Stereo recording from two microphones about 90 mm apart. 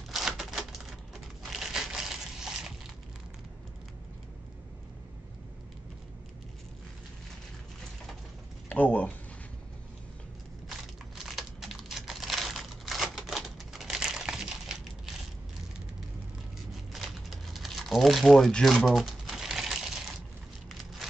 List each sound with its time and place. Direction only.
0.1 s typewriter: 5° right (ahead or behind)
1.5 s crushing: 5° right (ahead or behind)
8.6 s speech: 20° left (ahead or behind)
10.7 s typing: 5° right (ahead or behind)
16.9 s crumpling: centre (ahead or behind)